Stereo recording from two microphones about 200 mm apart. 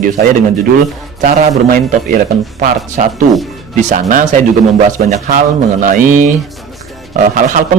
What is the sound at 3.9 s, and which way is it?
Speech, 40° right (ahead or behind).